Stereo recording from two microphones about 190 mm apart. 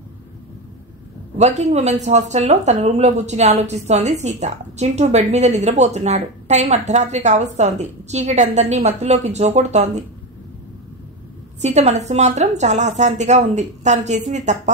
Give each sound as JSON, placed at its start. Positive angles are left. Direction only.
{"t": 1.4, "sound": "speech", "side_deg": -35}
{"t": 11.6, "sound": "speech", "side_deg": -35}